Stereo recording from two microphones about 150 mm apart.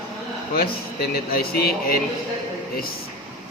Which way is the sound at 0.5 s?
90° left.